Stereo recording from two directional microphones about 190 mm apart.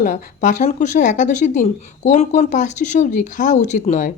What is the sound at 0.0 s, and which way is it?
Speech, 40° left (ahead or behind).